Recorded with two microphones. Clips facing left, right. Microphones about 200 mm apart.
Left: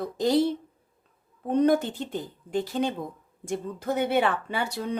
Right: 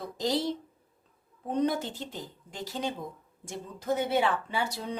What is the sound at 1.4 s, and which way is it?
Speech, 55° left (ahead or behind).